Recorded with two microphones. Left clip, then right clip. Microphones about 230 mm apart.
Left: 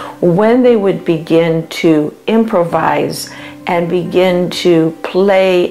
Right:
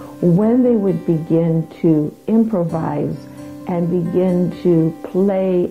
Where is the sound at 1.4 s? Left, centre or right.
Centre.